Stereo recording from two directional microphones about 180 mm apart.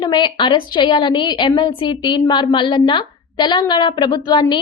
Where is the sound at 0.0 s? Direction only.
25° left (ahead or behind).